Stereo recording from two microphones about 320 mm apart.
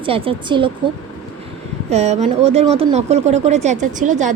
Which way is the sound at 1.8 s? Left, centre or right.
Centre.